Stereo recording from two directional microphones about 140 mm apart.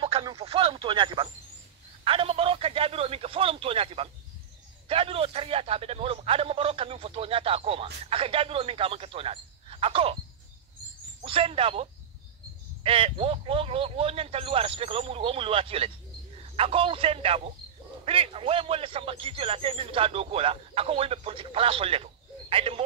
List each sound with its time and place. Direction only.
0.0 s a man's voice: 35° right (ahead or behind)
11.2 s a man's voice: 40° right (ahead or behind)